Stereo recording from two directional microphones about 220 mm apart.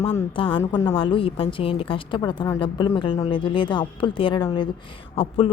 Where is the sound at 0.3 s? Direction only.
25° left (ahead or behind).